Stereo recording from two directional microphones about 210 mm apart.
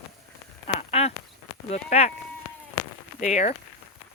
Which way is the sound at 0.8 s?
30° left (ahead or behind).